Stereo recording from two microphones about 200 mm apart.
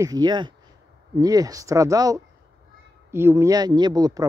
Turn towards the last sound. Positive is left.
turn(degrees=-20)  # may be behind; listen again after turning